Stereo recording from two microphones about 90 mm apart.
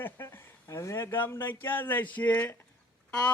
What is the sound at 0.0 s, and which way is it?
Speech, 25° left (ahead or behind).